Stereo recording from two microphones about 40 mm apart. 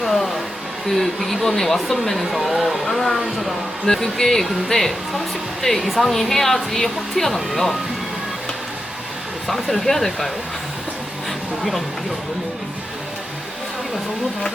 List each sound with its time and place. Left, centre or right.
0.0 s music: centre
0.9 s speech: centre
9.5 s speech: centre